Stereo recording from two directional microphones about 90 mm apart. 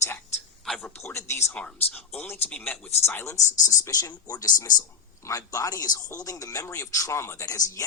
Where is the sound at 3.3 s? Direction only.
35° left (ahead or behind).